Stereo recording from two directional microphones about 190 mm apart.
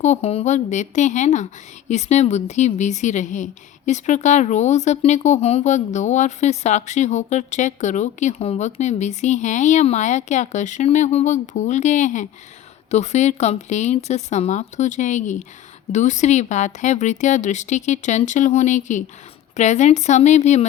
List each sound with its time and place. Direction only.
0.0 s a woman's voice: 35° left (ahead or behind)